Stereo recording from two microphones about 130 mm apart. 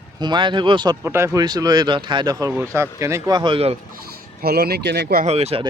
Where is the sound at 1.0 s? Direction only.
20° right (ahead or behind).